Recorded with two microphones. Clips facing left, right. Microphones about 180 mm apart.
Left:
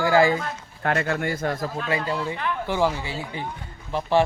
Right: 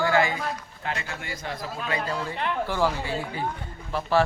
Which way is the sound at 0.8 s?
55° left (ahead or behind).